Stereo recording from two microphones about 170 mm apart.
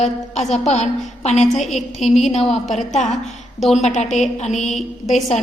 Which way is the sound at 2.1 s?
40° left (ahead or behind).